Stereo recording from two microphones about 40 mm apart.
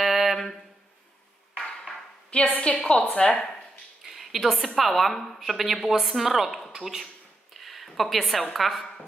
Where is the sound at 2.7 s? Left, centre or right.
Left.